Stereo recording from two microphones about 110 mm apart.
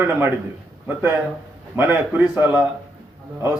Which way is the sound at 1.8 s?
20° right (ahead or behind).